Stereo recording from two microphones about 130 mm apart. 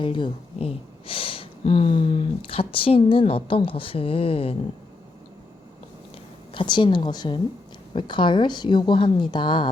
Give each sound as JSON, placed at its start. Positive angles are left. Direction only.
{"t": 0.0, "sound": "speech", "side_deg": 40}
{"t": 6.5, "sound": "a woman's voice", "side_deg": 40}